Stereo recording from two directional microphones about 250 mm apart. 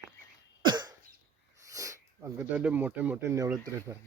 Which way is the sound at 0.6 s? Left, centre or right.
Centre.